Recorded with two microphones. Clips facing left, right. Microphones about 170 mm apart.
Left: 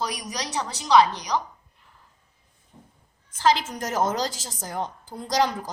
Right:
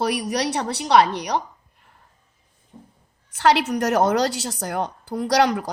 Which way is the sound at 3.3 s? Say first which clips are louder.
Right 4 dB; 70° right (ahead or behind).